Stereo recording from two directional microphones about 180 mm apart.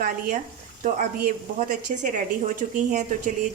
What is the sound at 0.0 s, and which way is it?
A woman's voice, 50° right (ahead or behind).